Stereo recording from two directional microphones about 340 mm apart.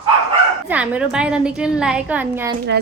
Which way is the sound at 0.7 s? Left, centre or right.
Centre.